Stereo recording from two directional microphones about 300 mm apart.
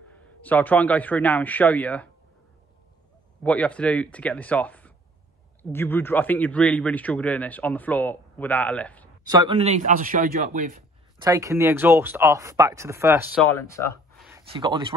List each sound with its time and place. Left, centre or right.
0.4 s speech: centre
3.4 s speech: centre
9.3 s a man's voice: centre
11.1 s speech: centre
13.6 s a sound: centre
14.5 s speech: centre